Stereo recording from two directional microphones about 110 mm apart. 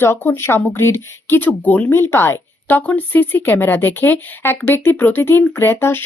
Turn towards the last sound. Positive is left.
turn(degrees=20)  # may be behind; listen again after turning